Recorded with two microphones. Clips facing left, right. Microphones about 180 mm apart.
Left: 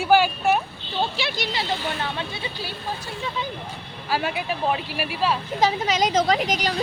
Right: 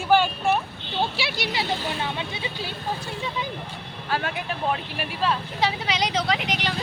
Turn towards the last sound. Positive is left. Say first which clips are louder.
# left 4 dB
turn(degrees=40)  # may be behind; listen again after turning